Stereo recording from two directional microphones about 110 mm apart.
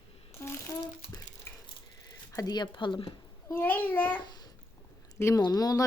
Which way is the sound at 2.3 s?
35° left (ahead or behind).